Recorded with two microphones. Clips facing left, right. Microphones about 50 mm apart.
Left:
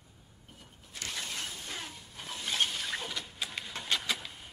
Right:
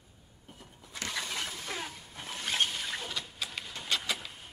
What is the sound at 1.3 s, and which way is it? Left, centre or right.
Shatter, right.